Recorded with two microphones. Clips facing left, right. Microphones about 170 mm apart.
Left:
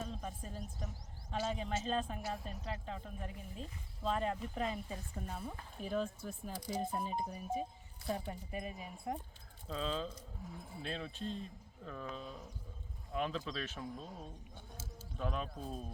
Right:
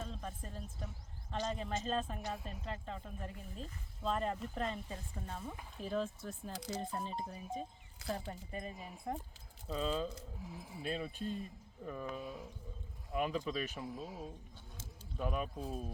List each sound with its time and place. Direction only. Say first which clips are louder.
0.0 s speech: left 1 dB; 5° left (ahead or behind)
6.9 s speech: left 2 dB; 10° left (ahead or behind); by 15.9 s 5° right (ahead or behind)